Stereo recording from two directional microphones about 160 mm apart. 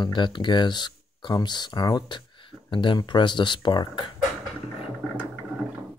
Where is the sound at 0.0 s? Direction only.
30° left (ahead or behind).